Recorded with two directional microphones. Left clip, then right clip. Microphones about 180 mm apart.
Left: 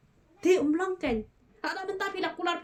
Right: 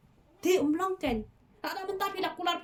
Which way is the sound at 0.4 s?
20° left (ahead or behind).